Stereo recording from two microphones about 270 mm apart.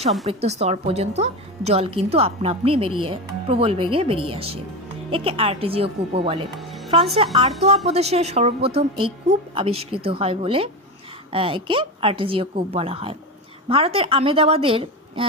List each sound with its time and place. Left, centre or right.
0.3 s a woman's voice: right
6.5 s music: centre
7.2 s a woman's voice: right